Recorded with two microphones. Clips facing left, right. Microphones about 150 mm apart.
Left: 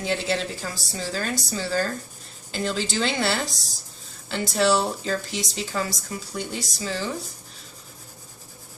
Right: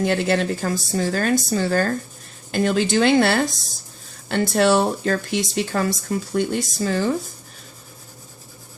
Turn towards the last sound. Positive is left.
turn(degrees=-50)  # may be behind; listen again after turning